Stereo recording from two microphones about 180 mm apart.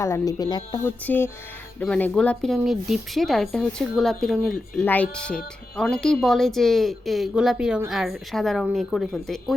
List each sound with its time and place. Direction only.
0.0 s speech: 20° left (ahead or behind); by 9.6 s centre (ahead or behind)